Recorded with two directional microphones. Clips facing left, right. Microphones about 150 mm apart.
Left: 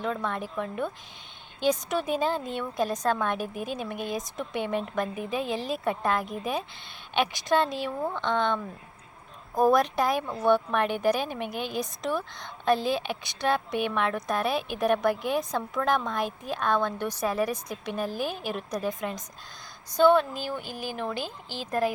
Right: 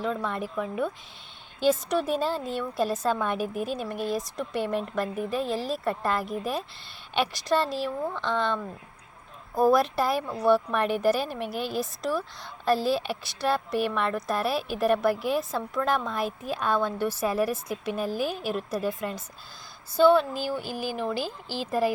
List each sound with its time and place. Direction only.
0.0 s a woman's voice: 5° right (ahead or behind)
21.2 s a woman's voice: 40° right (ahead or behind)
21.7 s a woman's voice: 5° right (ahead or behind)